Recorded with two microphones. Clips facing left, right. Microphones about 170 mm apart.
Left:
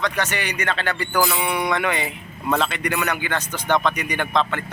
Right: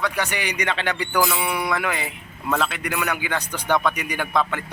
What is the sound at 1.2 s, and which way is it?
A man's voice, centre (ahead or behind).